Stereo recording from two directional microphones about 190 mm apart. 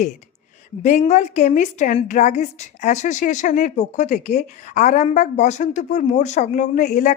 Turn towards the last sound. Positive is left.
turn(degrees=40)  # may be behind; listen again after turning